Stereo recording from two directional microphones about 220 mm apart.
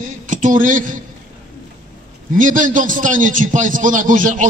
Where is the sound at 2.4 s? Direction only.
35° right (ahead or behind).